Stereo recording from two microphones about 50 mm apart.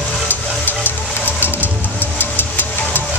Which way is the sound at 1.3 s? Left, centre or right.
Left.